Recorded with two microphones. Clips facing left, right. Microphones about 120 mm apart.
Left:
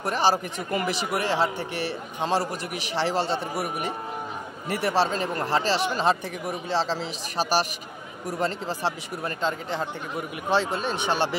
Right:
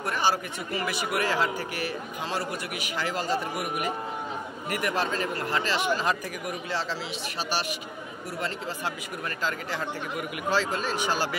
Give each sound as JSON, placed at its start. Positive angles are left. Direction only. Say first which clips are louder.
{"t": 0.0, "sound": "speech", "louder": "left 3 dB", "side_deg": 35}